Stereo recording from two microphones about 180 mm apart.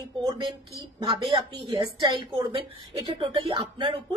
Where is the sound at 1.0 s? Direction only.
30° right (ahead or behind).